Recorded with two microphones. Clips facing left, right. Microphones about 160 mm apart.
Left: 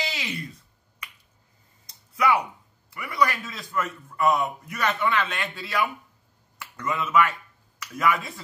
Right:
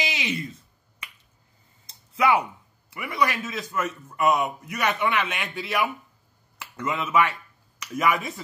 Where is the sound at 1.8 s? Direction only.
25° right (ahead or behind).